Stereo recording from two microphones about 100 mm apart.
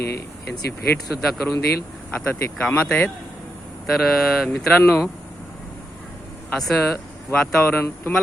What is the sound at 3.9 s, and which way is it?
Speech, centre (ahead or behind).